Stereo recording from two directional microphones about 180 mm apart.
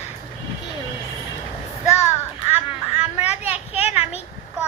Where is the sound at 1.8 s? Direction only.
40° left (ahead or behind).